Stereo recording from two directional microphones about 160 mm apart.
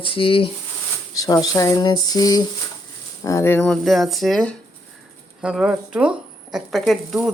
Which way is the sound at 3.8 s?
Centre (ahead or behind).